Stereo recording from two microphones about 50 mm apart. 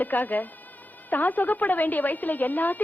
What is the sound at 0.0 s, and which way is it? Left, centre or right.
A woman's voice, left.